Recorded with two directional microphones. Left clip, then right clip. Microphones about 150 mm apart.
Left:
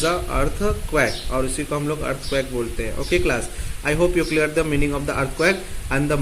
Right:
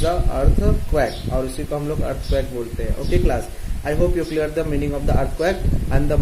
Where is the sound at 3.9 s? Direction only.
20° left (ahead or behind).